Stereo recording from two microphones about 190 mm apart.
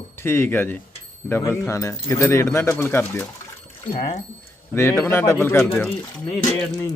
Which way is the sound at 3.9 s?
35° left (ahead or behind).